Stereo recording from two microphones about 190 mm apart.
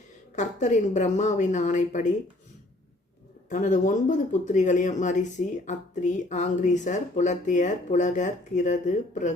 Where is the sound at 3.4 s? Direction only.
40° left (ahead or behind).